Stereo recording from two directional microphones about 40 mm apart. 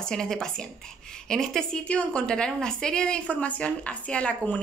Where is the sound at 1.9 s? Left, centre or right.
Left.